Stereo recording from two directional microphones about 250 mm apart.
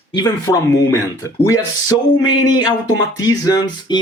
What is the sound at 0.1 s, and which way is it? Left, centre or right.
Speech, centre.